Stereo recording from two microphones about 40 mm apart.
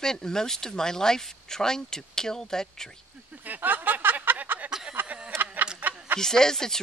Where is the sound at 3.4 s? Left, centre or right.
Right.